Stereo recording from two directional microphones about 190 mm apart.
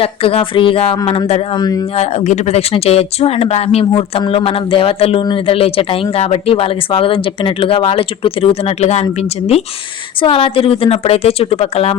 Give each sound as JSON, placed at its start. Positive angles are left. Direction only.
{"t": 0.0, "sound": "speech", "side_deg": 30}
{"t": 2.0, "sound": "speech", "side_deg": 35}
{"t": 10.2, "sound": "speech", "side_deg": 30}